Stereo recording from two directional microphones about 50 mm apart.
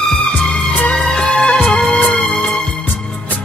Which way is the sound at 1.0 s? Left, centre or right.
Centre.